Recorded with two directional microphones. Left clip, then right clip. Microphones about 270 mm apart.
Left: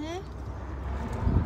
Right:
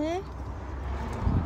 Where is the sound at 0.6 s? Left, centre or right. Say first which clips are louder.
Even; right.